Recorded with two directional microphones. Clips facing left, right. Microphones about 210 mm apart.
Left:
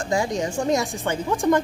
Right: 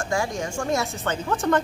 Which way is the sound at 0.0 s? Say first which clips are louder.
Left 3 dB; 20° left (ahead or behind).